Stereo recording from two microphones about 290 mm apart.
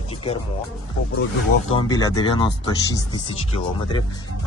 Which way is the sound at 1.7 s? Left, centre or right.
Centre.